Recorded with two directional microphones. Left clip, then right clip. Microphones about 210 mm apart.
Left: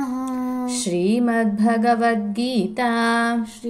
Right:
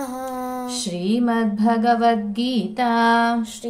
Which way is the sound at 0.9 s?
15° left (ahead or behind).